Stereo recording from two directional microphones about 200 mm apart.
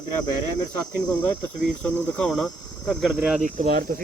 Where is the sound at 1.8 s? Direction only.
5° left (ahead or behind).